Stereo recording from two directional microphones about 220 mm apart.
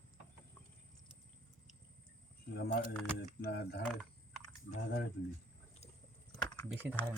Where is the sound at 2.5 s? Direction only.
45° left (ahead or behind).